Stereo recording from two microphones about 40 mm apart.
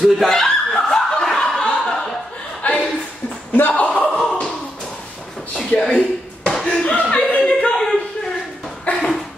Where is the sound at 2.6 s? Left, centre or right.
Left.